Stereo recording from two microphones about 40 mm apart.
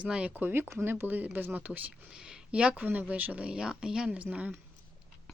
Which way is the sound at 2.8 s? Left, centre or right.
Right.